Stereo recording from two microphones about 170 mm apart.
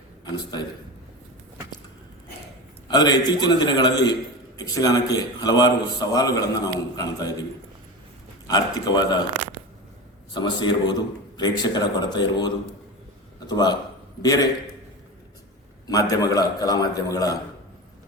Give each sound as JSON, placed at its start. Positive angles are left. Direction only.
{"t": 0.3, "sound": "a man's voice", "side_deg": 25}
{"t": 2.9, "sound": "a man's voice", "side_deg": 25}
{"t": 8.4, "sound": "a man's voice", "side_deg": 20}
{"t": 10.3, "sound": "a man's voice", "side_deg": 25}
{"t": 15.9, "sound": "a man's voice", "side_deg": 20}